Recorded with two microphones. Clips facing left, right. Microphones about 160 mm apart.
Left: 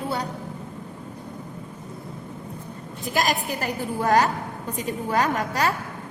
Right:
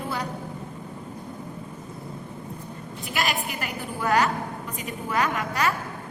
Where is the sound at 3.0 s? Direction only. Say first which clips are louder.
Left 4 dB; 40° left (ahead or behind).